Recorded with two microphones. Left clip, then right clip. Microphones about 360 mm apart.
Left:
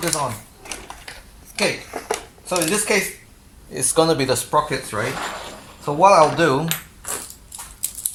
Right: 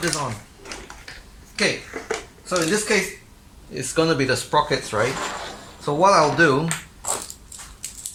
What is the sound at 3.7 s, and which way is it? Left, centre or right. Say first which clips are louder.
Speech: left 3 dB; centre.